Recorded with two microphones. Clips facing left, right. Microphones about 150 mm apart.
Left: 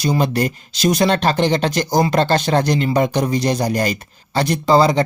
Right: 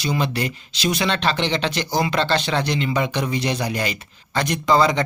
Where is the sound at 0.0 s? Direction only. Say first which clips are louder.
Left 5 dB; 45° left (ahead or behind).